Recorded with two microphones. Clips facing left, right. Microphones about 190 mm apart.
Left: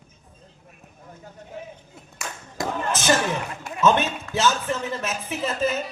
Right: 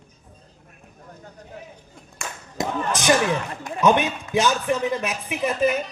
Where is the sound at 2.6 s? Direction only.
15° right (ahead or behind).